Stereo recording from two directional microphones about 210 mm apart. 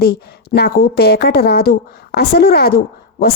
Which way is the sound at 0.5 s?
45° left (ahead or behind).